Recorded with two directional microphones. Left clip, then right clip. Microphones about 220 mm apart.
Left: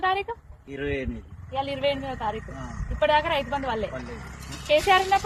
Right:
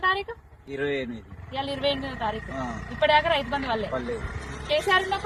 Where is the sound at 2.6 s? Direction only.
30° right (ahead or behind).